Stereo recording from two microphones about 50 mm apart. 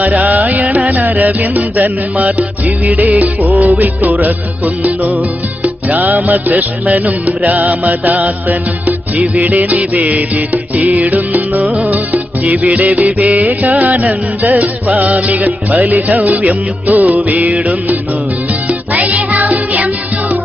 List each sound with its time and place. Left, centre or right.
0.0 s music: right
11.6 s music: right